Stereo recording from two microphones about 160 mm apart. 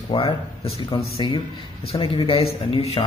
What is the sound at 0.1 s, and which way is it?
A man's voice, 30° left (ahead or behind).